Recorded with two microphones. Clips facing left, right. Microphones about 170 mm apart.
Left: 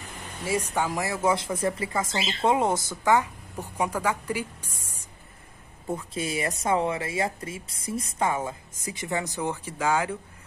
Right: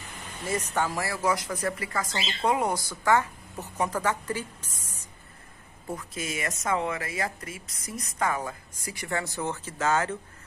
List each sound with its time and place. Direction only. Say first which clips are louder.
0.5 s a woman's voice: left 2 dB; 10° left (ahead or behind)
5.9 s speech: left 4 dB; 30° left (ahead or behind); by 10.1 s 10° left (ahead or behind)